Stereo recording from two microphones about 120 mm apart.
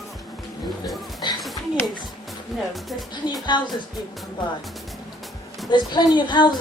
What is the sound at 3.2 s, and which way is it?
Speech, 40° left (ahead or behind).